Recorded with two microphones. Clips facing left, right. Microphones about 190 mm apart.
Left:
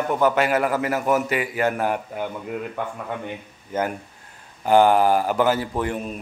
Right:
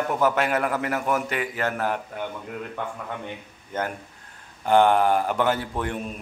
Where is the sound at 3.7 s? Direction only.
5° left (ahead or behind).